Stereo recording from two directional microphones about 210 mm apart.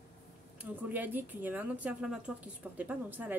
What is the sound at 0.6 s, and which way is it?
Speech, 10° right (ahead or behind).